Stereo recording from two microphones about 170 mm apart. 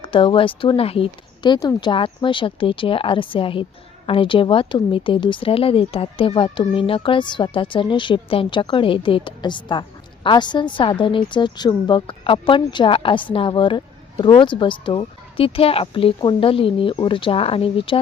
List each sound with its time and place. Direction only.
0.0 s a woman's voice: 30° left (ahead or behind)